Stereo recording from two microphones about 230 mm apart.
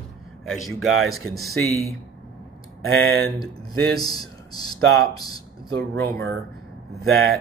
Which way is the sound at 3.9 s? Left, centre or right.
Centre.